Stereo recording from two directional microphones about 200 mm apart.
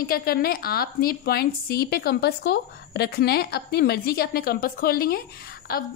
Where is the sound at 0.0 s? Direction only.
50° left (ahead or behind).